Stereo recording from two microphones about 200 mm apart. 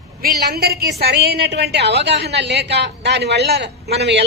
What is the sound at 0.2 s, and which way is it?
A woman's voice, 50° right (ahead or behind).